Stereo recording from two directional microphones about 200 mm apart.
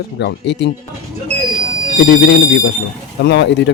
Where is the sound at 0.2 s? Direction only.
60° left (ahead or behind).